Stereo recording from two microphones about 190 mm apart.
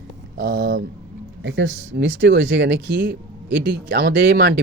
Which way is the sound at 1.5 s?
70° right (ahead or behind).